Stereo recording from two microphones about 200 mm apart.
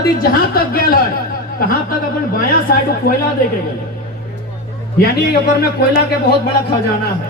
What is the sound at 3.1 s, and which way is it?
Speech, 50° left (ahead or behind).